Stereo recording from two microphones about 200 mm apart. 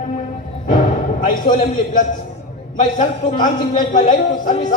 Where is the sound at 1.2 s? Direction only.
45° left (ahead or behind).